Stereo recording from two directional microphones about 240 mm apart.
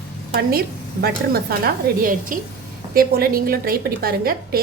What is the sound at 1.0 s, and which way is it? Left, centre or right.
A woman's voice, right.